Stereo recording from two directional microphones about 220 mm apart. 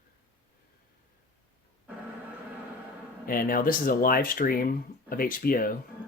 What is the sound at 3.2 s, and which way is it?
Speech, 40° left (ahead or behind).